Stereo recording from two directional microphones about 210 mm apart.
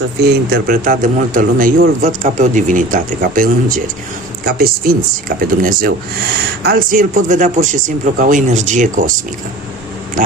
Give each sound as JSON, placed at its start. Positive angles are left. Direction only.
{"t": 0.2, "sound": "speech", "side_deg": -50}